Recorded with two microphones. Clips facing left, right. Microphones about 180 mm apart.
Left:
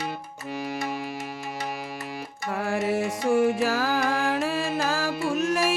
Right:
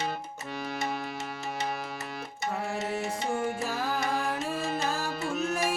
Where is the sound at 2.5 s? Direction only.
90° left.